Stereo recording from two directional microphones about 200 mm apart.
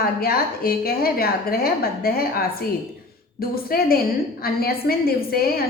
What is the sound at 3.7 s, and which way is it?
A woman's voice, 50° left (ahead or behind).